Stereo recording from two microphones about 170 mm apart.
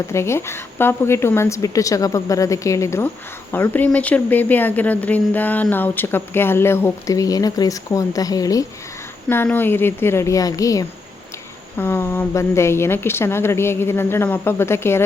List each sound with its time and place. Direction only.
0.1 s speech: 15° left (ahead or behind)